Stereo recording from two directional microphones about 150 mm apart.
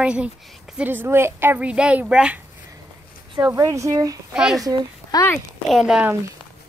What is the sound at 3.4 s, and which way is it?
Speech, 20° right (ahead or behind).